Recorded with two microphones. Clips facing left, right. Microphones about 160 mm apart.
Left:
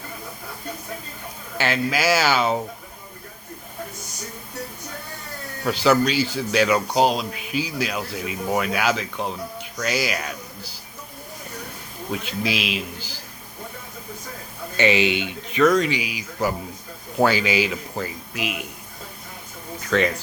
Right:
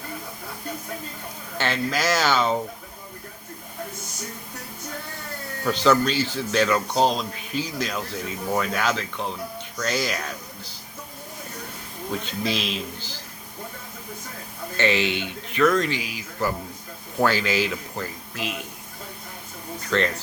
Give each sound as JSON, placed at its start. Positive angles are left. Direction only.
{"t": 1.5, "sound": "speech", "side_deg": 5}
{"t": 5.6, "sound": "speech", "side_deg": 10}
{"t": 12.1, "sound": "speech", "side_deg": 10}
{"t": 14.8, "sound": "speech", "side_deg": 15}
{"t": 19.9, "sound": "speech", "side_deg": 10}